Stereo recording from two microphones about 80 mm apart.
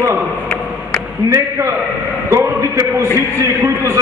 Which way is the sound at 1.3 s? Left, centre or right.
Right.